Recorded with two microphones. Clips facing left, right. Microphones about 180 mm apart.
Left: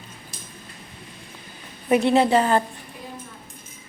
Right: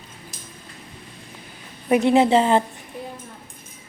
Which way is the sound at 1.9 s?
15° right (ahead or behind).